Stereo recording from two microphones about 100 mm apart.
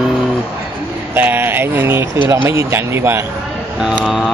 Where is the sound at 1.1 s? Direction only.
20° right (ahead or behind).